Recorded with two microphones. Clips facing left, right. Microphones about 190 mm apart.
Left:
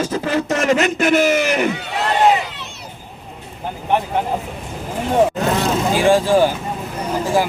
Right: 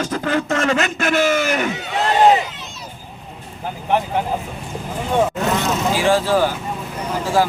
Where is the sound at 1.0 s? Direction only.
15° left (ahead or behind).